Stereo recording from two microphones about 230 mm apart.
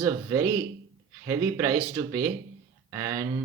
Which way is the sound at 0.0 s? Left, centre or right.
Centre.